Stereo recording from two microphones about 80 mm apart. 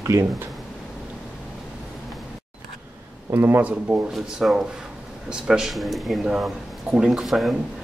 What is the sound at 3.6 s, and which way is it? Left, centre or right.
Speech, centre.